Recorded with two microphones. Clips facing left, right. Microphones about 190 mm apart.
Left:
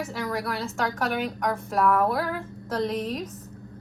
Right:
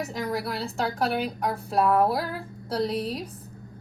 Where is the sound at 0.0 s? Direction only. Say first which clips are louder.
Even; 40° right (ahead or behind).